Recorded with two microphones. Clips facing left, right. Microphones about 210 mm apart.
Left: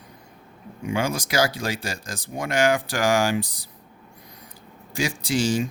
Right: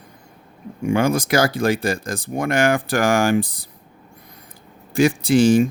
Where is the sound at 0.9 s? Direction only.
55° right (ahead or behind).